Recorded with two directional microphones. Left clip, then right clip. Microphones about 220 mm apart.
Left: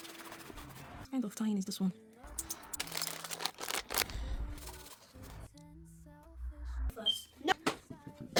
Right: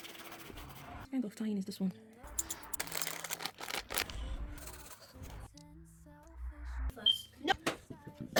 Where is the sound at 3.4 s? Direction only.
10° left (ahead or behind).